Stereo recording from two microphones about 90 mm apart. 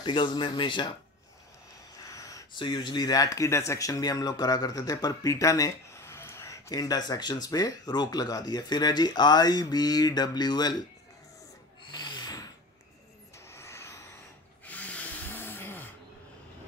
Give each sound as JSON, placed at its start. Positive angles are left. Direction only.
{"t": 0.0, "sound": "speech", "side_deg": 65}
{"t": 2.0, "sound": "a sound", "side_deg": 40}
{"t": 2.5, "sound": "speech", "side_deg": 60}
{"t": 11.9, "sound": "gasp", "side_deg": 50}
{"t": 13.5, "sound": "vehicle", "side_deg": 30}
{"t": 14.7, "sound": "rub", "side_deg": 15}